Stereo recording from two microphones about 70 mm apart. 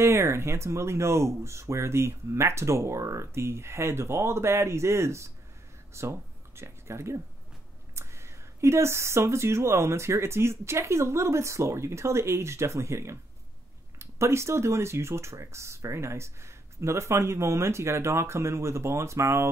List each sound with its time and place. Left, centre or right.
0.0 s speech: right